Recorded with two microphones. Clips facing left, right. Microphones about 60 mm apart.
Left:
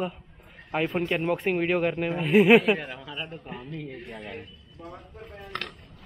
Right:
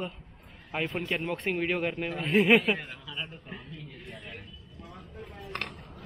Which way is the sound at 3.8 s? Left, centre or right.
Left.